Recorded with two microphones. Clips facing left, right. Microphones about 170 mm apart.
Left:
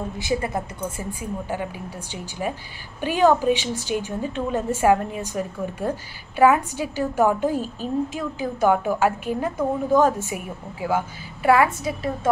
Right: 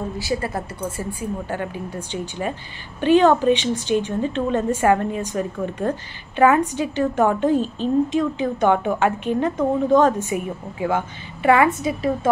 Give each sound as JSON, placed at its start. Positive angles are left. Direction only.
{"t": 0.2, "sound": "a woman's voice", "side_deg": 20}